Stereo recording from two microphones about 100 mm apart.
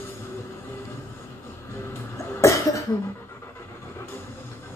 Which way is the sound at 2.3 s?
30° left (ahead or behind).